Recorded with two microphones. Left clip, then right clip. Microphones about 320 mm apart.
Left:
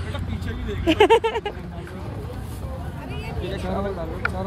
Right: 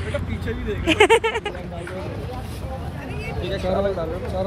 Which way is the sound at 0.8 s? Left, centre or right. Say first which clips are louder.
Even; centre.